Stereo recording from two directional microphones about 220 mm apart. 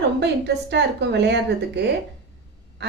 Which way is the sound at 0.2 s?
50° right (ahead or behind).